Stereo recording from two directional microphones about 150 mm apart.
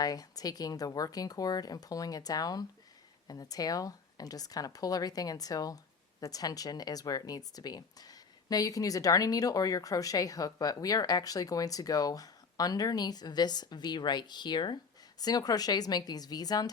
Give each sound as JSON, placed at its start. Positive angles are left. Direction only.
{"t": 0.0, "sound": "speech", "side_deg": 25}